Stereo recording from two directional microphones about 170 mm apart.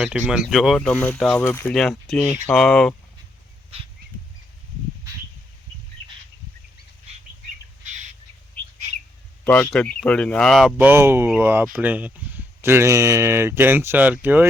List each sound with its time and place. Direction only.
0.0 s speech: 5° right (ahead or behind)
7.9 s squawk: 45° right (ahead or behind)
9.4 s speech: 10° left (ahead or behind)
10.8 s speech: 10° right (ahead or behind)